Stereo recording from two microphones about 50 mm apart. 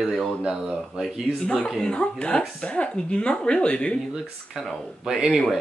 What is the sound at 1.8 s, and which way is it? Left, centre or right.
Speech, left.